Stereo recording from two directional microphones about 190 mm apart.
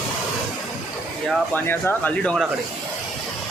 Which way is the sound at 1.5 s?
10° left (ahead or behind).